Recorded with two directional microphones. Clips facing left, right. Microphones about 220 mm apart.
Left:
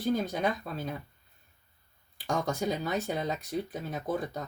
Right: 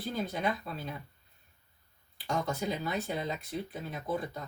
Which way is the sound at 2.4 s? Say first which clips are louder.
Left 3 dB; 45° left (ahead or behind).